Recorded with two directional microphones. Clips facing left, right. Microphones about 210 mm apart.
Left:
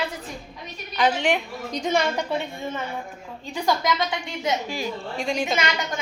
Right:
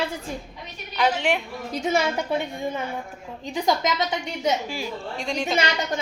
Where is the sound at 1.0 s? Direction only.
5° right (ahead or behind); by 4.2 s 20° right (ahead or behind).